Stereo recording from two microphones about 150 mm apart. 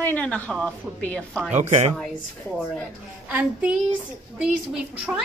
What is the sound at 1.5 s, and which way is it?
Speech, 50° right (ahead or behind).